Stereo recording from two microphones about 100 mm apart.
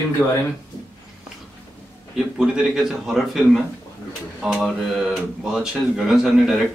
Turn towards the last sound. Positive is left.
turn(degrees=0)  # may be behind; listen again after turning